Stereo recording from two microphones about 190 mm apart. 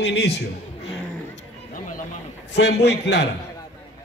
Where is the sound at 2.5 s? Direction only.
65° left (ahead or behind).